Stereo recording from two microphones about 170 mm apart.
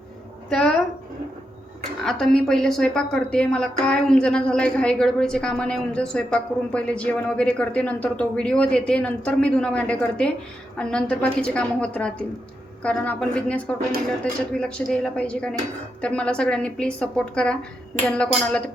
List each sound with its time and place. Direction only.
0.5 s a woman's voice: 5° left (ahead or behind)
2.0 s a woman's voice: 5° left (ahead or behind)